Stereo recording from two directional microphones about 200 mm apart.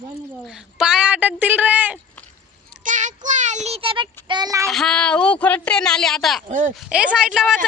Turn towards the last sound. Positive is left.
turn(degrees=-5)  # may be behind; listen again after turning